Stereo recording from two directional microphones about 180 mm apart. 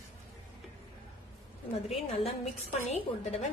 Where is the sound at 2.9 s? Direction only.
40° left (ahead or behind).